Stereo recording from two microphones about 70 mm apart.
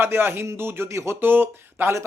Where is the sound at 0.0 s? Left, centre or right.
Right.